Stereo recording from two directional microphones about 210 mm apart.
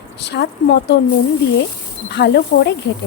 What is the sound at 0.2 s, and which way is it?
Speech, 55° left (ahead or behind).